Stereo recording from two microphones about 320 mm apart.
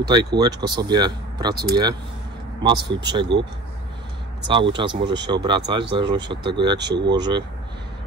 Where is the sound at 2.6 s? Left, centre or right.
Centre.